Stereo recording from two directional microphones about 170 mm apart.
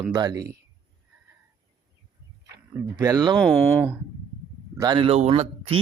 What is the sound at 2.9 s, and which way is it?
Speech, 20° right (ahead or behind).